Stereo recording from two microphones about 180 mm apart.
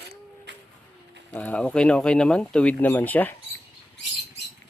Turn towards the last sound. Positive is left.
turn(degrees=10)  # may be behind; listen again after turning